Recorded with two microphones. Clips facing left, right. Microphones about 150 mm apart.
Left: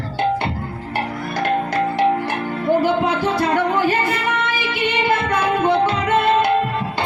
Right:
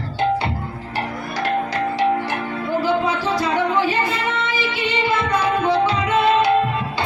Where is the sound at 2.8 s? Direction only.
55° left (ahead or behind).